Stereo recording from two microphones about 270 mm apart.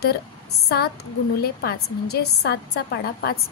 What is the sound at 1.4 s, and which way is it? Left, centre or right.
A woman's voice, left.